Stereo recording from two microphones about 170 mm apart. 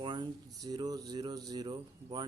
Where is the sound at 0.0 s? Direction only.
25° right (ahead or behind).